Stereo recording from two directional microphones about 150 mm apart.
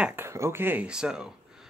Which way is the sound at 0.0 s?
15° right (ahead or behind).